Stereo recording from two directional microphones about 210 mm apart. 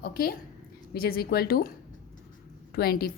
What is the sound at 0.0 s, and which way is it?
A woman's voice, 45° left (ahead or behind).